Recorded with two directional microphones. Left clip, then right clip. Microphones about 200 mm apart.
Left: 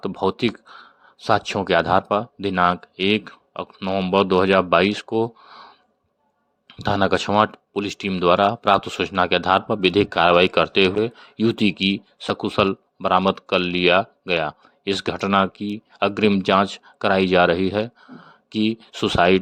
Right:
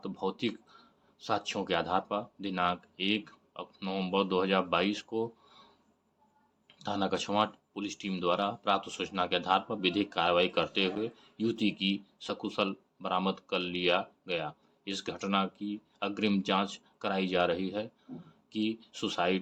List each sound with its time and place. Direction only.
0.0 s speech: 45° left (ahead or behind)
6.7 s speech: 45° left (ahead or behind)